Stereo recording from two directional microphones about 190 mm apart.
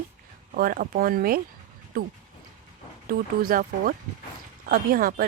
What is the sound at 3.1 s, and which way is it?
Speech, 50° right (ahead or behind).